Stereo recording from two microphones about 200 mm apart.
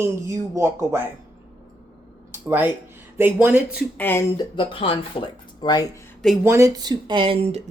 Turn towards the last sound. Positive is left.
turn(degrees=-35)  # may be behind; listen again after turning